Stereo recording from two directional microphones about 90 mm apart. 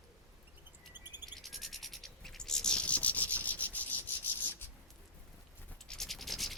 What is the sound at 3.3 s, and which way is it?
Insect, 15° left (ahead or behind).